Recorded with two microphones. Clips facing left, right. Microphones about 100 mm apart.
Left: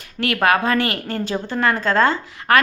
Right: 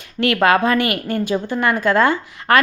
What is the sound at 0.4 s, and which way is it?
A woman's voice, 20° right (ahead or behind).